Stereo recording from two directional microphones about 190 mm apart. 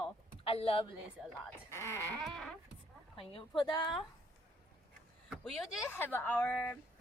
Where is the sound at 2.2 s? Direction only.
Centre (ahead or behind).